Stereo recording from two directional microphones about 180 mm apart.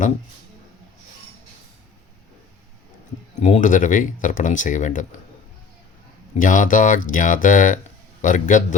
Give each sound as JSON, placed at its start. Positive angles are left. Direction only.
{"t": 3.4, "sound": "speech", "side_deg": 45}
{"t": 6.3, "sound": "speech", "side_deg": 45}